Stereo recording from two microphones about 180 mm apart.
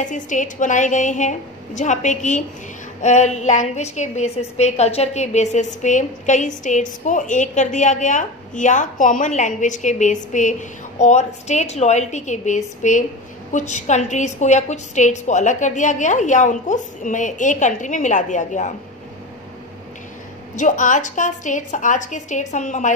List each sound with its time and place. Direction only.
0.0 s a woman's voice: 45° left (ahead or behind)
20.5 s a woman's voice: 45° left (ahead or behind)